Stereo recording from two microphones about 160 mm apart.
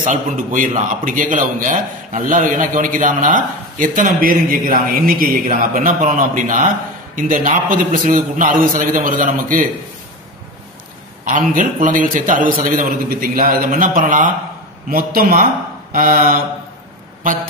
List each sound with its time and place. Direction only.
0.0 s a man's voice: 55° right (ahead or behind)
11.2 s a man's voice: 55° right (ahead or behind)